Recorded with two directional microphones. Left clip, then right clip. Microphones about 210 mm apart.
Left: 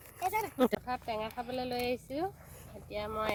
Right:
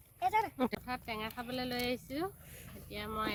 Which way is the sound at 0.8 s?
15° right (ahead or behind).